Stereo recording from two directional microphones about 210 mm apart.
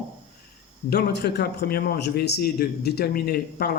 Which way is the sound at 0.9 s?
50° left (ahead or behind).